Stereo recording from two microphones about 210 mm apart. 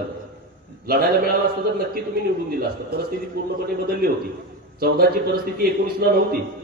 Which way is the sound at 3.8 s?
45° right (ahead or behind).